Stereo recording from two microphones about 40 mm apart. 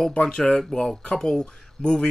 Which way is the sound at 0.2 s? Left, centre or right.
Centre.